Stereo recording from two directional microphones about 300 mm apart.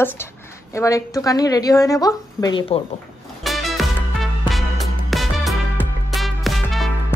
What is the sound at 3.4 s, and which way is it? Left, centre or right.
Music, centre.